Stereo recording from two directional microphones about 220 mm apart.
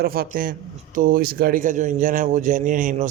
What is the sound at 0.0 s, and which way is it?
A man's voice, 40° right (ahead or behind).